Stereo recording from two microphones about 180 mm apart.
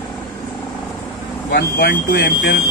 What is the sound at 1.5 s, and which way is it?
Speech, 65° left (ahead or behind).